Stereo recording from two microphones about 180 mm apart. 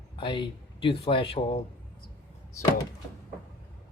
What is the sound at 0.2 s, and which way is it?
Speech, 25° left (ahead or behind).